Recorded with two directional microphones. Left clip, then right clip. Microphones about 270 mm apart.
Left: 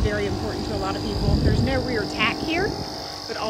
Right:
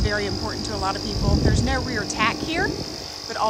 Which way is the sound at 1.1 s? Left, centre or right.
Centre.